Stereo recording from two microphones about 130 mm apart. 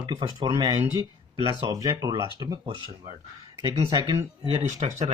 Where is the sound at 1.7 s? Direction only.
25° right (ahead or behind).